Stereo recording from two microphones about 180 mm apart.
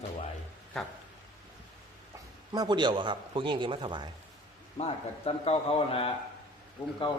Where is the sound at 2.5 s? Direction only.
25° right (ahead or behind).